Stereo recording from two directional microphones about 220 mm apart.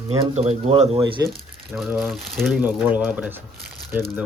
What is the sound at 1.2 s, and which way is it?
Speech, 15° right (ahead or behind).